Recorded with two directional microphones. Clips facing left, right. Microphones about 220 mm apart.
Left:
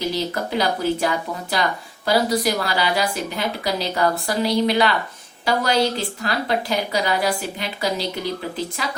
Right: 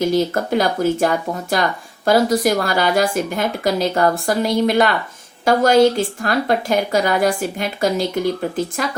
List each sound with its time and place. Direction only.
0.0 s a woman's voice: 50° right (ahead or behind)